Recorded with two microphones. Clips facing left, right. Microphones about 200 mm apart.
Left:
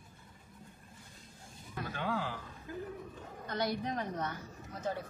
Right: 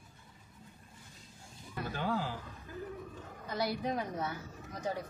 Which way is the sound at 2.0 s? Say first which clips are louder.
Right 1 dB; 40° right (ahead or behind).